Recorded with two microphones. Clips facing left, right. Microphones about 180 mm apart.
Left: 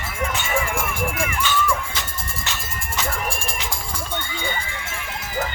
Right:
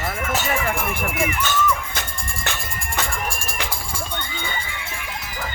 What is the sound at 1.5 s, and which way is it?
Speech, 45° right (ahead or behind).